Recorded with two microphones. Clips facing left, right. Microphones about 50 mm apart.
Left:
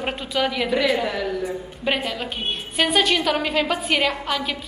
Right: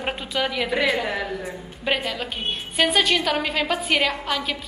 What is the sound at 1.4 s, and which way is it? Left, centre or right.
A woman's voice, centre.